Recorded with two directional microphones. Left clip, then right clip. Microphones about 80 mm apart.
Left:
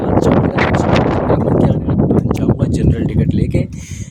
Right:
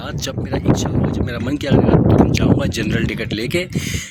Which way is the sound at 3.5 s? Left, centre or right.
Centre.